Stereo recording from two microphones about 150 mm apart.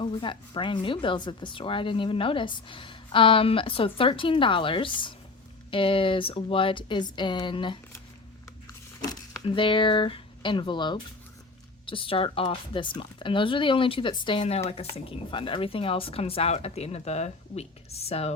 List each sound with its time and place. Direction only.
0.0 s a woman's voice: 35° left (ahead or behind)
9.4 s a woman's voice: 35° left (ahead or behind)